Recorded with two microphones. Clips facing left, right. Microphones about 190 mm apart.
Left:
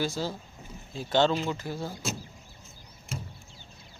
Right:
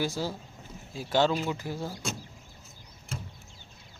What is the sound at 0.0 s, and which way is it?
Speech, 15° right (ahead or behind).